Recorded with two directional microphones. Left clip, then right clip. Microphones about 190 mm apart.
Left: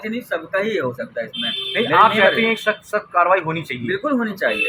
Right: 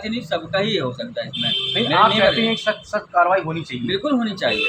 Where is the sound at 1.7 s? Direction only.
40° left (ahead or behind).